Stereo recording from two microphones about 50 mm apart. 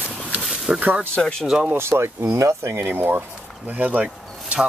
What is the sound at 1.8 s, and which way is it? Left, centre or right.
Speech, right.